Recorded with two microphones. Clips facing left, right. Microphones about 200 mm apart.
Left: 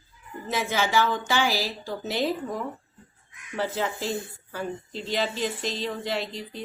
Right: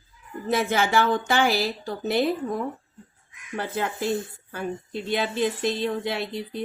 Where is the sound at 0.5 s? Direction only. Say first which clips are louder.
Right 2 dB; 55° right (ahead or behind).